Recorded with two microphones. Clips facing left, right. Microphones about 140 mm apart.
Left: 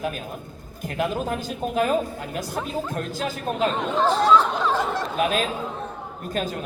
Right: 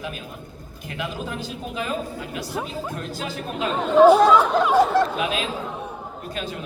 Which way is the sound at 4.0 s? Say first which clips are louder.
Right 6 dB; 10° right (ahead or behind).